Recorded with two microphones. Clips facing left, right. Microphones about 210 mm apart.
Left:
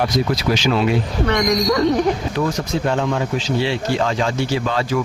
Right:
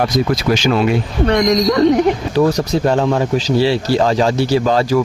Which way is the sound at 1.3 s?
35° right (ahead or behind).